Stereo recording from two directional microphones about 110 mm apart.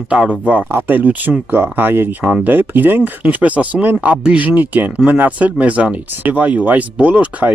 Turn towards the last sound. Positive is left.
turn(degrees=-15)  # may be behind; listen again after turning